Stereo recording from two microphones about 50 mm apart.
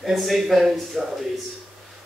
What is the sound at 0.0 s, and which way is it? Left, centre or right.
Speech, centre.